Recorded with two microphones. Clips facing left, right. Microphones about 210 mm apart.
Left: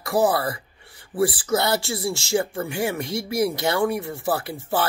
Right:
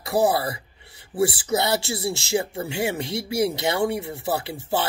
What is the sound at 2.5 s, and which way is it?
Speech, 25° right (ahead or behind).